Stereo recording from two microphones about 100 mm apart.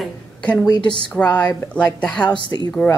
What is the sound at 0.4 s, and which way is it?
Speech, 10° left (ahead or behind).